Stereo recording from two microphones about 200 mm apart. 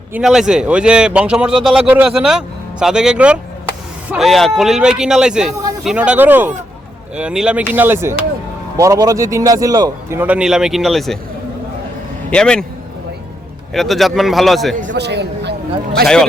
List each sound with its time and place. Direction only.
0.1 s a man's voice: centre (ahead or behind)
12.3 s speech: 5° left (ahead or behind)
13.7 s speech: centre (ahead or behind)
14.9 s a man's voice: 55° right (ahead or behind)